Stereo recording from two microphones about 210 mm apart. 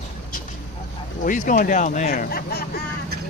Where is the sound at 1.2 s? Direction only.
40° left (ahead or behind).